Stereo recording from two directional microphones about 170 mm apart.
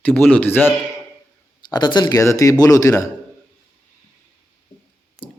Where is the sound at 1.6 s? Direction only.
25° left (ahead or behind).